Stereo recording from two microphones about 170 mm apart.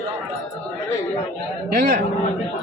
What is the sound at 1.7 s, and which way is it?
Speech, 60° right (ahead or behind).